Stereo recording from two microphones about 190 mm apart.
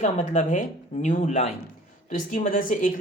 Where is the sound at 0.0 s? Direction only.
40° left (ahead or behind).